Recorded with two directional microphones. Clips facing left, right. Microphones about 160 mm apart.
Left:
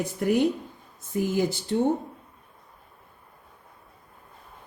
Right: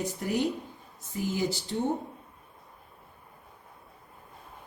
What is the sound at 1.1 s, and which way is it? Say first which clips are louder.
Speech: left 6 dB; 55° left (ahead or behind).